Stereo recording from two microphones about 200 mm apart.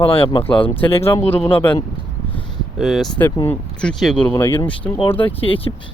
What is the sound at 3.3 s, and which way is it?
Speech, 10° left (ahead or behind).